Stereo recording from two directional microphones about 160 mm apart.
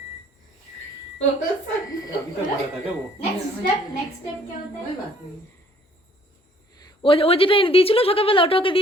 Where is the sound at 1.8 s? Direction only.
20° left (ahead or behind).